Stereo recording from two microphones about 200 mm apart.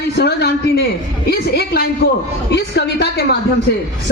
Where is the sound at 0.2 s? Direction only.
55° left (ahead or behind).